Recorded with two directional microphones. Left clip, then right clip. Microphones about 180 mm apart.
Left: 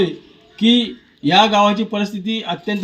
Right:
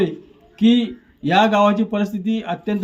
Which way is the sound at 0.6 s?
10° right (ahead or behind).